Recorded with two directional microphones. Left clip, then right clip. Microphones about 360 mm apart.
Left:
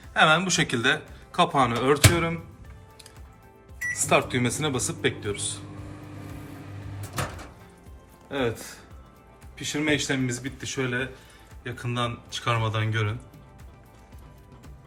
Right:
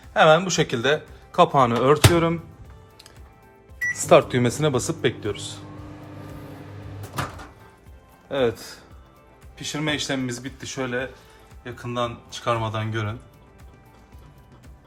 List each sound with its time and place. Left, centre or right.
0.1 s speech: centre
3.9 s speech: right
8.3 s speech: right